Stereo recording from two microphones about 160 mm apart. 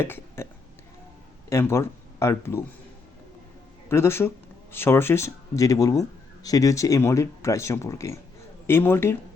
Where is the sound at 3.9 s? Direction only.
15° left (ahead or behind).